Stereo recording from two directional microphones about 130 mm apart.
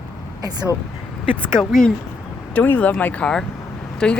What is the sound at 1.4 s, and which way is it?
Speech, 5° left (ahead or behind).